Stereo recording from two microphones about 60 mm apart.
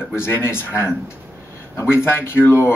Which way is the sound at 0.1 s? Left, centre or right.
Left.